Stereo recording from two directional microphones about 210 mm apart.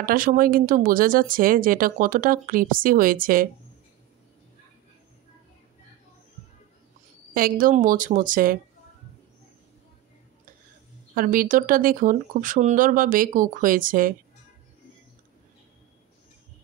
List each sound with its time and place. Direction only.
0.0 s speech: 40° right (ahead or behind)
7.3 s speech: 40° right (ahead or behind)
11.1 s speech: 40° right (ahead or behind)